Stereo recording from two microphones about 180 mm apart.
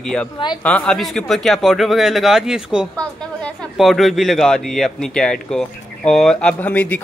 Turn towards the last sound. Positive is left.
turn(degrees=10)  # may be behind; listen again after turning